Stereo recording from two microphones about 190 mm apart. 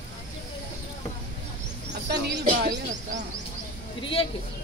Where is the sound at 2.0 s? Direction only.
60° right (ahead or behind).